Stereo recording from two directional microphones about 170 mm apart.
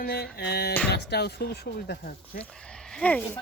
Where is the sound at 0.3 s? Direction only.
70° left (ahead or behind).